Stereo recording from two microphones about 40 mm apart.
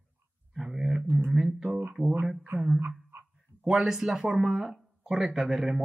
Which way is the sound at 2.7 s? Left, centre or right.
Right.